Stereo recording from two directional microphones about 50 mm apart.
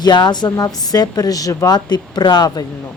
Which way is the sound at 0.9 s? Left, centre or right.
Left.